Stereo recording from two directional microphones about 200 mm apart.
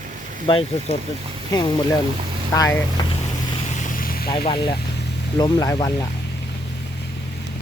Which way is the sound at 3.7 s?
40° left (ahead or behind).